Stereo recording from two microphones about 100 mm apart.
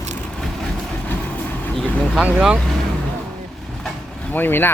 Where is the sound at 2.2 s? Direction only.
10° right (ahead or behind).